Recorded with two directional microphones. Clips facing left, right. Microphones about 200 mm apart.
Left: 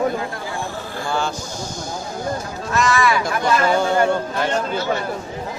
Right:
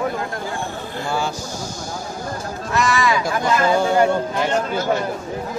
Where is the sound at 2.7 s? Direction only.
20° right (ahead or behind).